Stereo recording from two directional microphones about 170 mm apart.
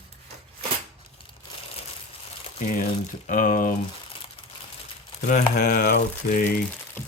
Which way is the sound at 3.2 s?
55° left (ahead or behind).